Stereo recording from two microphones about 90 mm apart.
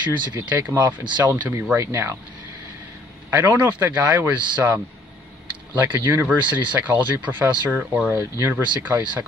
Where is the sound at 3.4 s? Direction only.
15° right (ahead or behind).